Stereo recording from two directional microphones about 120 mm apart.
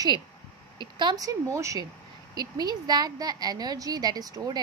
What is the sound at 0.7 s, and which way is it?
A woman's voice, 40° right (ahead or behind).